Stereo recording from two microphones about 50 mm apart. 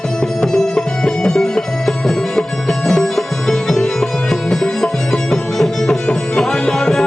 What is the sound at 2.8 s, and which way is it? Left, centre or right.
Music, centre.